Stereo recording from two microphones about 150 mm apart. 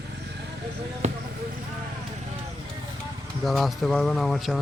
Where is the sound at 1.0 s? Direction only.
45° right (ahead or behind).